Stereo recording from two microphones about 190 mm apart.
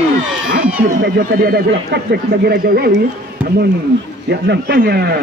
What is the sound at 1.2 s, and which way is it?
A man's voice, 55° right (ahead or behind).